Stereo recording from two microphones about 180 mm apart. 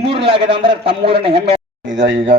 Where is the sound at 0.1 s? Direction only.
30° right (ahead or behind).